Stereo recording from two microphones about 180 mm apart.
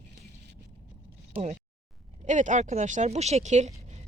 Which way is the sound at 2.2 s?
45° right (ahead or behind).